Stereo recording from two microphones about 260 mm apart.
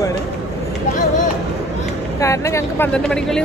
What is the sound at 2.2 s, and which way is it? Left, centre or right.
Speech, centre.